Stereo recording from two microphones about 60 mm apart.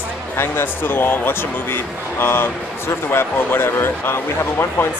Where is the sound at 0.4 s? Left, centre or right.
Left.